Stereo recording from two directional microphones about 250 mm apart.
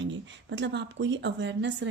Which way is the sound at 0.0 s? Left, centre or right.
Right.